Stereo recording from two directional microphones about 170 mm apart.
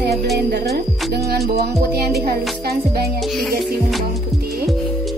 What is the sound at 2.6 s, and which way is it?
Music, 65° right (ahead or behind).